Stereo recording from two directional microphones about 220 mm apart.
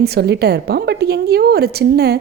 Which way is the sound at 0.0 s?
45° right (ahead or behind).